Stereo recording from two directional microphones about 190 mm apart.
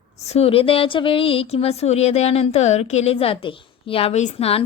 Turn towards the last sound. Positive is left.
turn(degrees=30)  # may be behind; listen again after turning